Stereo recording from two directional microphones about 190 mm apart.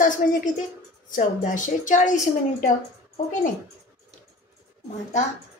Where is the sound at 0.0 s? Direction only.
45° left (ahead or behind).